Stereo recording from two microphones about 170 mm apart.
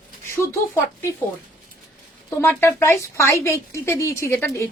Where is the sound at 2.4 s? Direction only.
15° left (ahead or behind).